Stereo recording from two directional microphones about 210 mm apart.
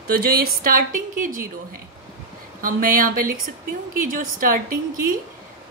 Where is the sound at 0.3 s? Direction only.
40° right (ahead or behind).